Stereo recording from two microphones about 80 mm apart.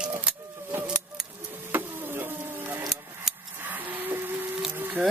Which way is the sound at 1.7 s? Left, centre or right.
Right.